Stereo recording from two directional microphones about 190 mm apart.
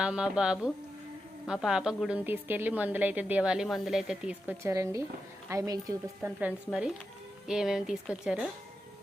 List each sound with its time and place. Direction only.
0.0 s a woman's voice: 5° right (ahead or behind)
6.2 s speech: 5° right (ahead or behind)